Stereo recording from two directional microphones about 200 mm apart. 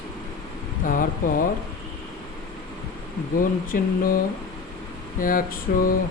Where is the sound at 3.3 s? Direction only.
45° left (ahead or behind).